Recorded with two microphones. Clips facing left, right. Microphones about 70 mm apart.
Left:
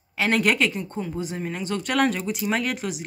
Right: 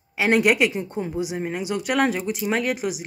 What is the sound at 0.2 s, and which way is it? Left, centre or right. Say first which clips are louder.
Speech: right 3 dB; centre.